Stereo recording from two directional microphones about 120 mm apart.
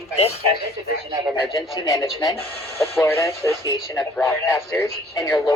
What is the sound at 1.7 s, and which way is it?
Speech, 25° left (ahead or behind).